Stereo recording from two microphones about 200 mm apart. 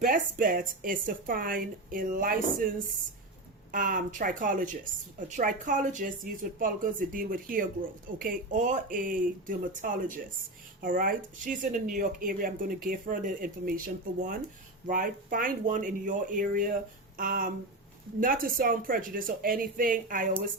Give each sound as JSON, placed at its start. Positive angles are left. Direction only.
{"t": 0.0, "sound": "speech", "side_deg": -45}